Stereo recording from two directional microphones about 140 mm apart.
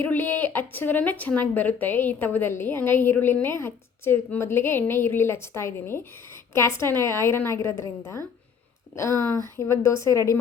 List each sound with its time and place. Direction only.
0.0 s a woman's voice: 15° left (ahead or behind)